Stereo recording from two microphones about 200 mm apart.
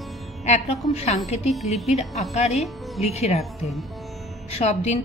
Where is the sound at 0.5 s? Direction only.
35° left (ahead or behind).